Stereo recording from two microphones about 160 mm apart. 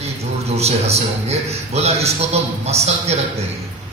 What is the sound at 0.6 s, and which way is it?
A man's voice, 40° right (ahead or behind).